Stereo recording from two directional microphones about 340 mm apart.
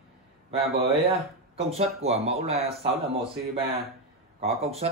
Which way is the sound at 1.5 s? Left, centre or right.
Centre.